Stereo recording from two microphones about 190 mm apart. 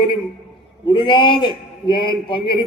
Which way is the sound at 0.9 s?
25° left (ahead or behind).